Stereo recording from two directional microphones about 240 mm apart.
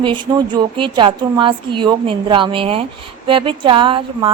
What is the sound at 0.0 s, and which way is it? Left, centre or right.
A woman's voice, centre.